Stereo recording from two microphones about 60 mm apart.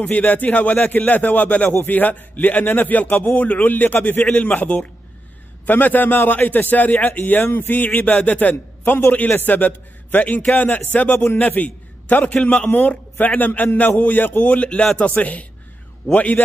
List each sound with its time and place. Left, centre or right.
0.0 s a man's voice: left